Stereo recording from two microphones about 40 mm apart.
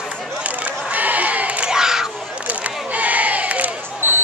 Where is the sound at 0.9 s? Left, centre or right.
Right.